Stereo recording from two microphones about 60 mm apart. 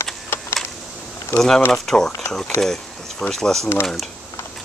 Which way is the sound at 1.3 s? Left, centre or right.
Left.